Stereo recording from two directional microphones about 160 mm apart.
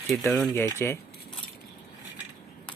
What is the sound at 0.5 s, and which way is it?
Speech, 15° left (ahead or behind).